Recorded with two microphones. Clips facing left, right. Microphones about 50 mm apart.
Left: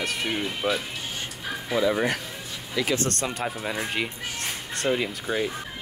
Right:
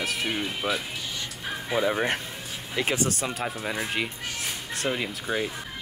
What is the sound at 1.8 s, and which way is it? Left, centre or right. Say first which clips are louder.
Speech: left 2 dB; right.